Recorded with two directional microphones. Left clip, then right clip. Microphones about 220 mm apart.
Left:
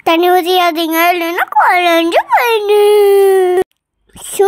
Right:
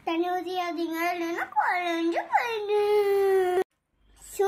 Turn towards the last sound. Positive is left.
turn(degrees=35)  # may be behind; listen again after turning